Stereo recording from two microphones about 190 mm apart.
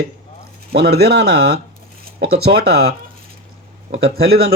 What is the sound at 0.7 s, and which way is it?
Speech, 60° right (ahead or behind).